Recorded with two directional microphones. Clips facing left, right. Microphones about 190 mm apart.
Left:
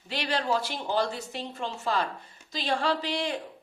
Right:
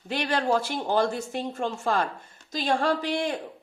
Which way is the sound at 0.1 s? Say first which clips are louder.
Right 4 dB; 50° right (ahead or behind).